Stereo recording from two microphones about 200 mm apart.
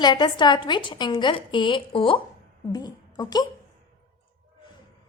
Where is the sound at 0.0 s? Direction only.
20° left (ahead or behind).